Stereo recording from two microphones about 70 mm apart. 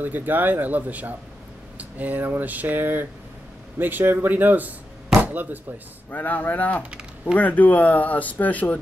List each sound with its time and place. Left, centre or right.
0.0 s speech: right
6.0 s speech: left